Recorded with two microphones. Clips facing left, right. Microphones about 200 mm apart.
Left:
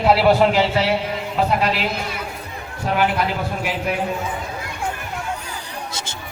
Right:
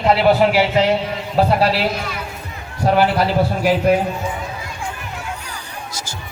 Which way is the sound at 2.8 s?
35° right (ahead or behind).